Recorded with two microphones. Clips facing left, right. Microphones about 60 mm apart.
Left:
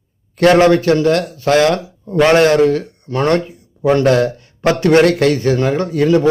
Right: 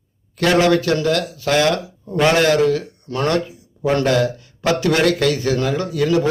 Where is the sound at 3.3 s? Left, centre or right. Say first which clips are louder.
Left 4 dB; left.